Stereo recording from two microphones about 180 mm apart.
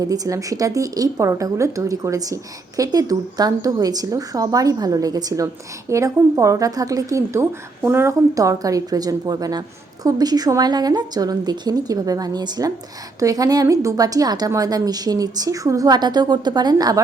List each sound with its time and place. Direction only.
0.0 s a woman's voice: 20° right (ahead or behind)